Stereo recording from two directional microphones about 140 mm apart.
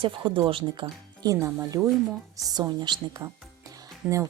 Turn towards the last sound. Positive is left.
turn(degrees=-20)  # may be behind; listen again after turning